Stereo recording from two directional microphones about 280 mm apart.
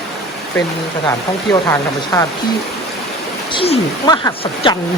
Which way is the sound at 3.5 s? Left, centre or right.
Centre.